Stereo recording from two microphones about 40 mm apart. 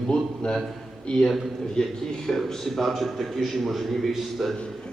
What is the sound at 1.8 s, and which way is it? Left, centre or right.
Speech, left.